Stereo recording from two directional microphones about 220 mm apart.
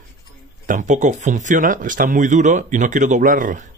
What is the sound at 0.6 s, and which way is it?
A man's voice, 35° right (ahead or behind).